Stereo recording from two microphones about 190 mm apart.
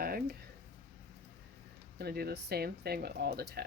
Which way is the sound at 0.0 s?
50° right (ahead or behind).